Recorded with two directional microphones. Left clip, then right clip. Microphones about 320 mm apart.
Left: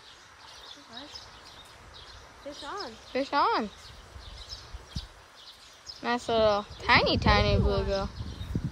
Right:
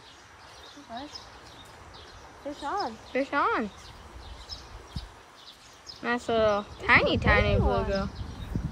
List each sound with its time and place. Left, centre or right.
2.6 s speech: centre
3.1 s speech: centre
6.0 s speech: centre
8.5 s horse: centre